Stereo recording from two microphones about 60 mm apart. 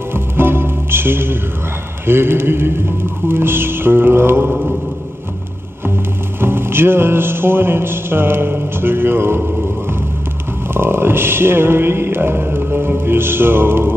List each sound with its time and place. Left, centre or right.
0.1 s music: right
2.0 s chant: right
6.4 s chant: right
10.7 s chant: right